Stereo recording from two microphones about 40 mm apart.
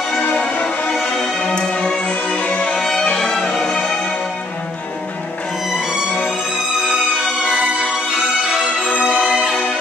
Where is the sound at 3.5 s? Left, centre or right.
Centre.